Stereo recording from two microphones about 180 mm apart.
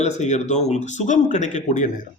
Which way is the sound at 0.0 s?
40° left (ahead or behind).